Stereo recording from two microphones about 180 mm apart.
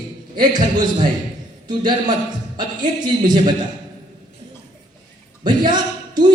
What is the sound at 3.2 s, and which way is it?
Speech, 25° right (ahead or behind).